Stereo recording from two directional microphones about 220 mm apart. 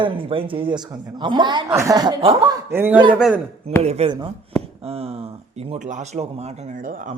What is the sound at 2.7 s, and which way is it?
Speech, 10° right (ahead or behind).